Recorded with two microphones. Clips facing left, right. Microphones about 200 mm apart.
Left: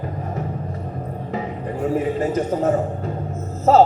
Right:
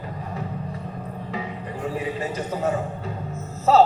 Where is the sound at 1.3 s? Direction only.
45° left (ahead or behind).